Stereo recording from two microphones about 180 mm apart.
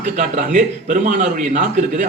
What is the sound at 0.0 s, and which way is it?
A man's voice, 45° right (ahead or behind).